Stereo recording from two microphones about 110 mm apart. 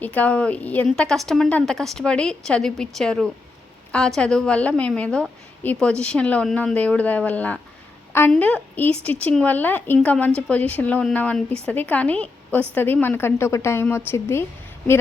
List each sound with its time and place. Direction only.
0.0 s a woman's voice: 15° left (ahead or behind)